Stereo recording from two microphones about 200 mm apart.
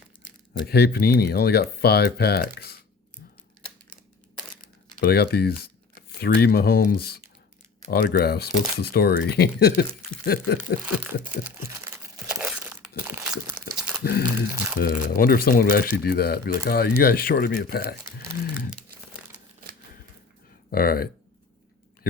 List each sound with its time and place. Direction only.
0.3 s speech: 50° left (ahead or behind)
4.6 s typing: 45° left (ahead or behind)
6.1 s speech: 50° left (ahead or behind)
12.4 s crumpling: 5° right (ahead or behind)
14.0 s speech: 50° left (ahead or behind)
20.7 s speech: 50° left (ahead or behind)